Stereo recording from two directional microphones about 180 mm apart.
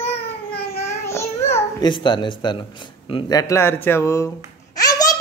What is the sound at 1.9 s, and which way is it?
Speech, 25° left (ahead or behind).